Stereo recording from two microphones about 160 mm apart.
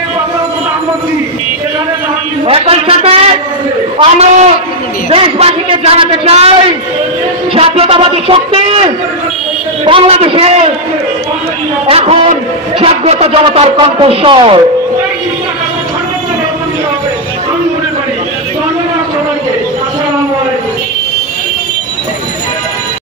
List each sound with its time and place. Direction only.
2.4 s a sound: 35° right (ahead or behind)
4.0 s a man's voice: 45° right (ahead or behind)
11.9 s a woman's voice: 40° right (ahead or behind)